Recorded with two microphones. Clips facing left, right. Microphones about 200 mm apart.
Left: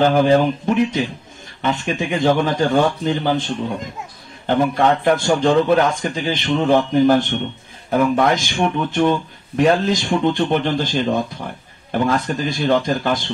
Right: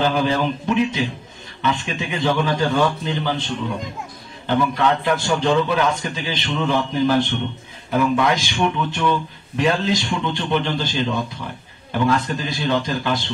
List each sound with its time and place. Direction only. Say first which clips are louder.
0.0 s a man's voice: left 6 dB; 50° left (ahead or behind)
4.5 s a man's voice: left 3 dB; 45° left (ahead or behind)